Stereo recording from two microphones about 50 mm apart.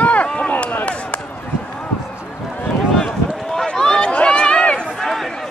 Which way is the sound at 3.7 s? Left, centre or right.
Centre.